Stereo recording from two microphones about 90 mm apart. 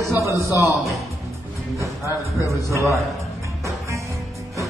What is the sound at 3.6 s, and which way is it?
Music, 35° right (ahead or behind).